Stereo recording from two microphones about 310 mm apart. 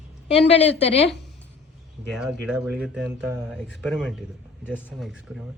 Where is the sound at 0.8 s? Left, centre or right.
Centre.